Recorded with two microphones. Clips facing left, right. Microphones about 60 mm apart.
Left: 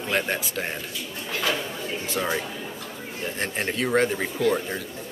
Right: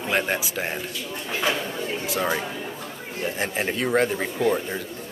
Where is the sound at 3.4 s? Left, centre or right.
Centre.